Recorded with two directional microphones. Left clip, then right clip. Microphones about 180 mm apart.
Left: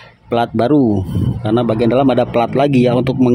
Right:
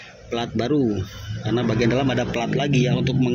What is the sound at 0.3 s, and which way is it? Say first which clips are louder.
A man's voice: left 10 dB; 25° left (ahead or behind).